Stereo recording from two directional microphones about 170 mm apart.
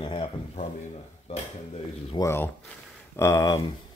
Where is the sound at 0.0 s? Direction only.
30° left (ahead or behind).